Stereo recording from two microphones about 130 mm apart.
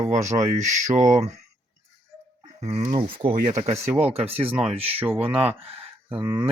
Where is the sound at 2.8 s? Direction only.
35° right (ahead or behind).